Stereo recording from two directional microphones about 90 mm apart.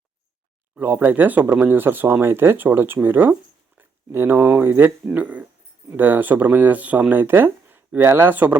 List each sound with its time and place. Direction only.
0.8 s speech: 20° right (ahead or behind)